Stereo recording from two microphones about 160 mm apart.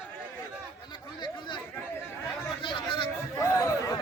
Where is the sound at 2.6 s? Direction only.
30° left (ahead or behind).